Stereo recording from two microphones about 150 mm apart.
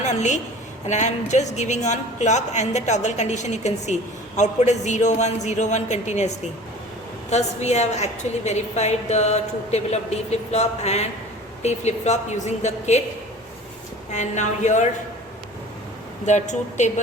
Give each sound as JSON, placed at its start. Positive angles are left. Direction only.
{"t": 0.0, "sound": "a woman's voice", "side_deg": 50}
{"t": 14.1, "sound": "a woman's voice", "side_deg": 50}
{"t": 16.2, "sound": "a woman's voice", "side_deg": 50}